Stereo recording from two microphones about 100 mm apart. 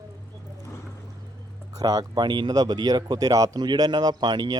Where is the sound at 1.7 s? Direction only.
40° right (ahead or behind).